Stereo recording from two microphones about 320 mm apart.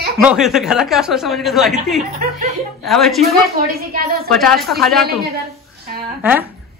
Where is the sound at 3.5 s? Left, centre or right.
Right.